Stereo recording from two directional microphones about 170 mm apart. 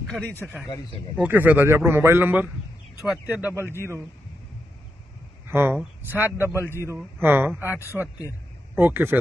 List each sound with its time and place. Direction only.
0.1 s a man's voice: 5° left (ahead or behind)
0.4 s speech: 5° right (ahead or behind)
3.6 s a man's voice: 15° left (ahead or behind)
5.5 s speech: 15° right (ahead or behind)
6.5 s a man's voice: 15° left (ahead or behind)
6.9 s speech: 15° right (ahead or behind)
7.9 s speech: centre (ahead or behind)
8.7 s speech: 15° right (ahead or behind)